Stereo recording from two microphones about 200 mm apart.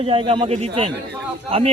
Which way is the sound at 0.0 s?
30° right (ahead or behind).